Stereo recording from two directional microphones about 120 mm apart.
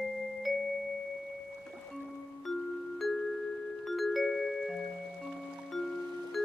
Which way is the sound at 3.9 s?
Centre (ahead or behind).